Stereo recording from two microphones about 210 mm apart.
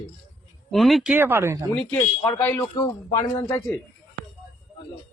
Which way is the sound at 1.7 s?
5° left (ahead or behind).